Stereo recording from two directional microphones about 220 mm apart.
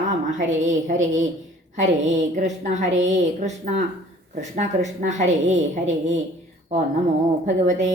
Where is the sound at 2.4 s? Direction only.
35° right (ahead or behind).